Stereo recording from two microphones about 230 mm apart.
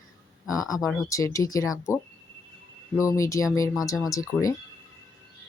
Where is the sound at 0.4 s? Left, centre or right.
Centre.